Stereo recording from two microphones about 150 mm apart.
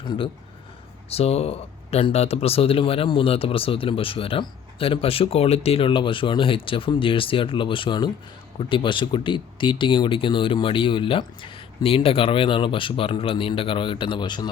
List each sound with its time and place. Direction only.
0.0 s speech: 30° left (ahead or behind)